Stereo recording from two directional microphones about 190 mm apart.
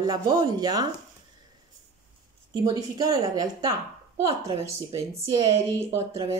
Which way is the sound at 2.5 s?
20° right (ahead or behind).